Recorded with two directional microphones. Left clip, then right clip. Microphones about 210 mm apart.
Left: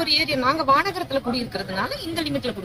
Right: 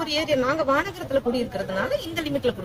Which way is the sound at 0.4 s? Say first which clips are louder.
Left 3 dB; 5° right (ahead or behind).